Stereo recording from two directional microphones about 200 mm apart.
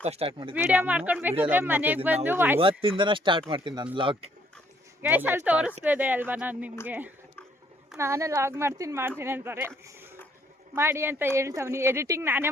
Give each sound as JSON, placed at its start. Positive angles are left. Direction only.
{"t": 0.0, "sound": "speech", "side_deg": -30}
{"t": 0.5, "sound": "speech", "side_deg": -10}
{"t": 2.6, "sound": "speech", "side_deg": -25}
{"t": 5.0, "sound": "speech", "side_deg": -10}